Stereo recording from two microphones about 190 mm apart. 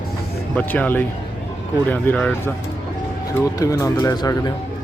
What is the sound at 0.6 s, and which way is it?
Speech, 10° left (ahead or behind).